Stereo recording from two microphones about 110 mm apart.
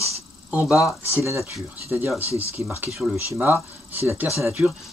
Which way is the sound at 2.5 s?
25° right (ahead or behind).